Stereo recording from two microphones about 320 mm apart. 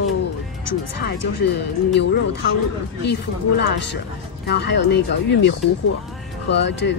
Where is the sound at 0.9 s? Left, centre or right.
Left.